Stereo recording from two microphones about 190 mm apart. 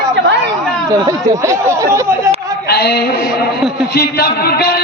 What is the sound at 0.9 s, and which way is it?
Speech, 20° right (ahead or behind).